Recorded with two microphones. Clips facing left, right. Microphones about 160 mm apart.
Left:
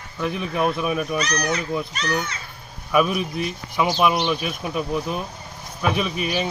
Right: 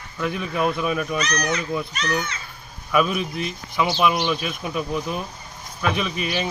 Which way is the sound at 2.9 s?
15° left (ahead or behind).